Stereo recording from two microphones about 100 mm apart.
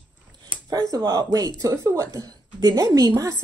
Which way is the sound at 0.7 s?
40° right (ahead or behind).